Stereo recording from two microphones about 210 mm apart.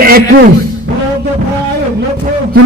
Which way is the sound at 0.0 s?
45° right (ahead or behind).